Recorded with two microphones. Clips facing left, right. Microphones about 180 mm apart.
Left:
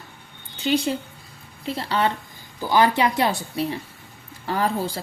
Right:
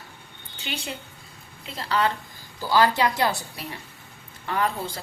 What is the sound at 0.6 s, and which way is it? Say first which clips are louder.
A woman's voice: left 12 dB; 35° left (ahead or behind).